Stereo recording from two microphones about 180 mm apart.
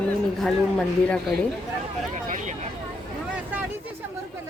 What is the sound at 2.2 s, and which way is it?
Vehicle, 45° right (ahead or behind).